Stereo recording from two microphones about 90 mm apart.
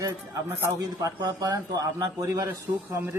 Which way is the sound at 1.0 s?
45° right (ahead or behind).